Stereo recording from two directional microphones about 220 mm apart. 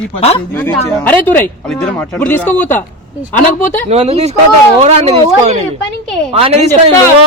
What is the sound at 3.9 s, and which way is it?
Speech, 30° right (ahead or behind).